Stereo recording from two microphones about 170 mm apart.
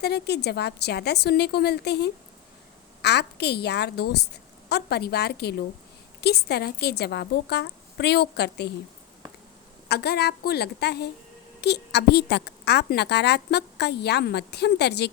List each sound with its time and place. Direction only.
0.0 s a woman's voice: 75° left (ahead or behind)
9.9 s a woman's voice: 70° left (ahead or behind)